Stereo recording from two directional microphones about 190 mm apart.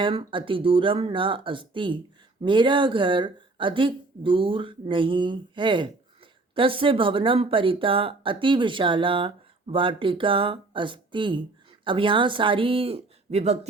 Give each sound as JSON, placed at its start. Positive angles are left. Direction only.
{"t": 0.0, "sound": "speech", "side_deg": -25}